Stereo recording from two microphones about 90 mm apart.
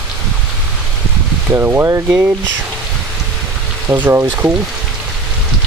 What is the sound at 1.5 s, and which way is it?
Speech, 30° right (ahead or behind).